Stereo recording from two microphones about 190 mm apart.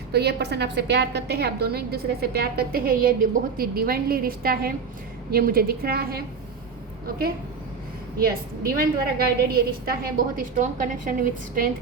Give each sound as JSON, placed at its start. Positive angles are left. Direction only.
{"t": 0.1, "sound": "a woman's voice", "side_deg": -60}
{"t": 8.2, "sound": "a woman's voice", "side_deg": -50}